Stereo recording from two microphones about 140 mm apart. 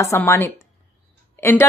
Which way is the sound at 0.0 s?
20° left (ahead or behind).